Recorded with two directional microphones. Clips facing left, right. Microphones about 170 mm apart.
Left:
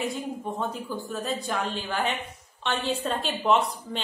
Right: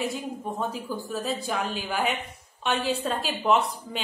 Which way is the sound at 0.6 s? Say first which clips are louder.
Even; 5° right (ahead or behind).